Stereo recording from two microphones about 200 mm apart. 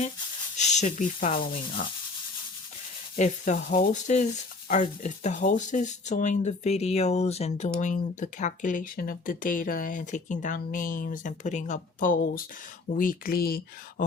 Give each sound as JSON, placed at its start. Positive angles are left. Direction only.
{"t": 0.5, "sound": "speech", "side_deg": 35}
{"t": 3.2, "sound": "speech", "side_deg": 35}